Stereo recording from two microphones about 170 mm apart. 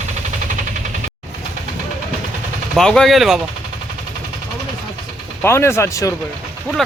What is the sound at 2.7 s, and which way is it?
Speech, 5° left (ahead or behind).